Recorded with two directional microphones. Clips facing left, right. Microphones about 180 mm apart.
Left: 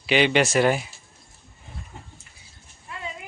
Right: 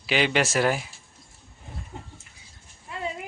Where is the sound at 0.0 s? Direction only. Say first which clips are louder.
Left 4 dB; centre (ahead or behind).